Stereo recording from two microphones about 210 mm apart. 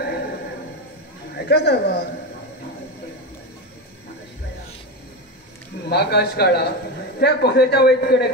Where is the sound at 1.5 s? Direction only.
50° left (ahead or behind).